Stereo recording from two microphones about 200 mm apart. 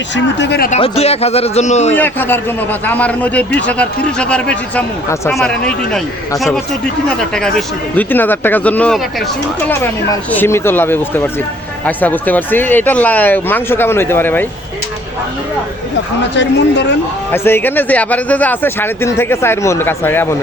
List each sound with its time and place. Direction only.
0.3 s speech: 55° left (ahead or behind)
0.7 s a man's voice: 30° left (ahead or behind)
1.9 s speech: 10° left (ahead or behind)
7.2 s speech: 5° left (ahead or behind)
16.3 s speech: 60° left (ahead or behind)
17.3 s speech: 10° left (ahead or behind)